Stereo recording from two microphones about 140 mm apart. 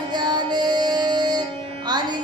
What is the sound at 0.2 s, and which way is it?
Music, 30° right (ahead or behind).